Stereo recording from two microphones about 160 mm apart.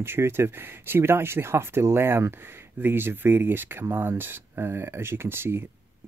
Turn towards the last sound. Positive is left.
turn(degrees=-15)  # may be behind; listen again after turning